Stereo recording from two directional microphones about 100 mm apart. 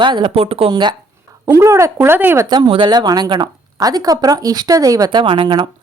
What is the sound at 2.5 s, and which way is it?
A woman's voice, 45° right (ahead or behind).